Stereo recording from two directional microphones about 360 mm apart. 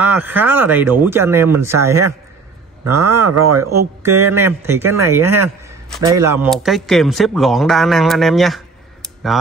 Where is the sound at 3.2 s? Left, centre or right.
Right.